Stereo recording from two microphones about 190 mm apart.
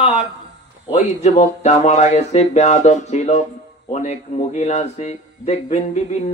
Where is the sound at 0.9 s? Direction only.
35° left (ahead or behind).